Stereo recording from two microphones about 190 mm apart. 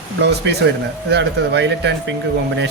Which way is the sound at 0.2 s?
65° right (ahead or behind).